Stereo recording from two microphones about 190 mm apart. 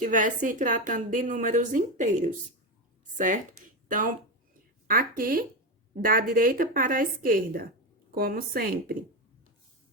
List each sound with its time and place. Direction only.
0.0 s a woman's voice: 45° right (ahead or behind)